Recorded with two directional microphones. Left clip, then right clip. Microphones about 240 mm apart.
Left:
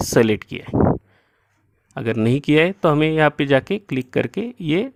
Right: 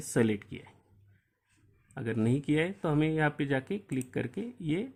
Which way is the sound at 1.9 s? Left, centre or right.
Left.